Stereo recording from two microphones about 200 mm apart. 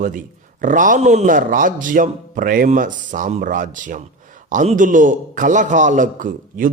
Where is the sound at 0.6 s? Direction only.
40° right (ahead or behind).